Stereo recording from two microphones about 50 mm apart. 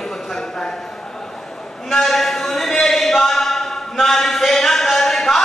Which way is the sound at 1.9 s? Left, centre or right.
Centre.